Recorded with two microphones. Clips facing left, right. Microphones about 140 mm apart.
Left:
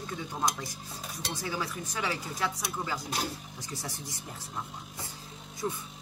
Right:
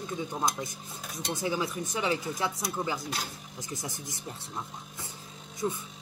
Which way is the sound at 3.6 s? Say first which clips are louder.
Right 2 dB; 20° right (ahead or behind).